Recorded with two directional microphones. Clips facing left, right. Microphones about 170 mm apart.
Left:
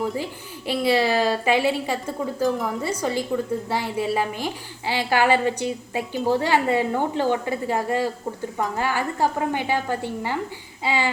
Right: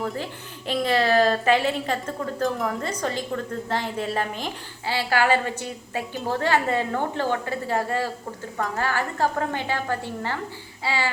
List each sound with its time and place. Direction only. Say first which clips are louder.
0.7 s a woman's voice: left 1 dB; 10° left (ahead or behind)